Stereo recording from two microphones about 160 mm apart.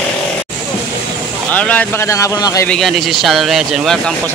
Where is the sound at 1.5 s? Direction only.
10° left (ahead or behind).